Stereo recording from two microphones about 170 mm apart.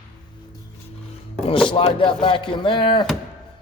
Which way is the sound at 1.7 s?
30° left (ahead or behind).